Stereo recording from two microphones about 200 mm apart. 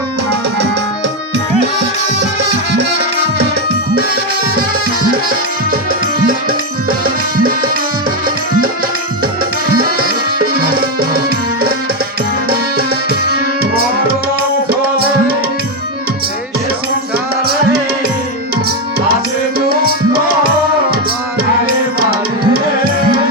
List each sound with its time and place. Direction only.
7.0 s music: 45° right (ahead or behind)
10.3 s music: 45° right (ahead or behind)
12.5 s music: 50° right (ahead or behind)
14.7 s music: 50° right (ahead or behind)
19.5 s music: 50° right (ahead or behind)
22.1 s tabla: 50° right (ahead or behind)